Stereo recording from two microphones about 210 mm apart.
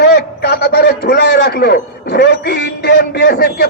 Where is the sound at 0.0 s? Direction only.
50° left (ahead or behind).